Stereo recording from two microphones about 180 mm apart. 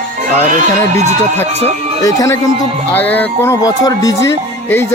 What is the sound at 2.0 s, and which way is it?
Speech, 20° left (ahead or behind).